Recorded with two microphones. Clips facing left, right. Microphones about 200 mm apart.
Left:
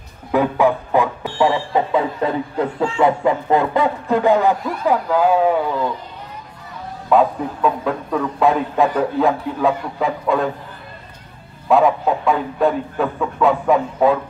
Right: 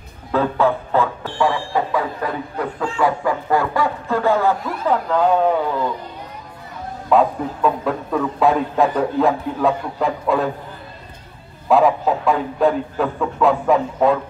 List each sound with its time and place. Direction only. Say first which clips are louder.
0.3 s speech: left 2 dB; 15° left (ahead or behind)
7.1 s a man's voice: left 1 dB; centre (ahead or behind)
11.7 s a man's voice: even; centre (ahead or behind)